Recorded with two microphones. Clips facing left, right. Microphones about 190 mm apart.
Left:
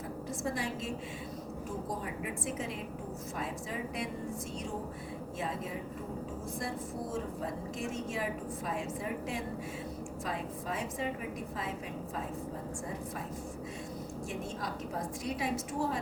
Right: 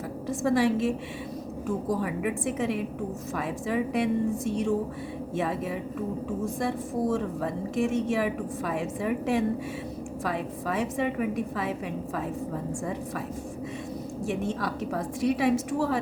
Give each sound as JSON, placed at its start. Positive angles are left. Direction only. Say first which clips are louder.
{"t": 0.4, "sound": "a woman's voice", "louder": "right 13 dB", "side_deg": -75}
{"t": 6.6, "sound": "a woman's voice", "louder": "right 9 dB", "side_deg": -75}
{"t": 14.3, "sound": "a woman's voice", "louder": "right 10 dB", "side_deg": -75}